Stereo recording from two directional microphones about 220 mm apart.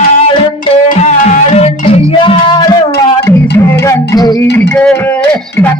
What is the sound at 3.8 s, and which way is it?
Music, 15° left (ahead or behind).